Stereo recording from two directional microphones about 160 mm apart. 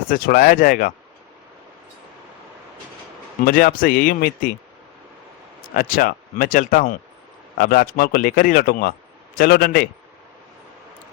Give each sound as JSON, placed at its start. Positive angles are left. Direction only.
{"t": 0.1, "sound": "a man's voice", "side_deg": 60}
{"t": 3.4, "sound": "a man's voice", "side_deg": 65}
{"t": 5.7, "sound": "a man's voice", "side_deg": 60}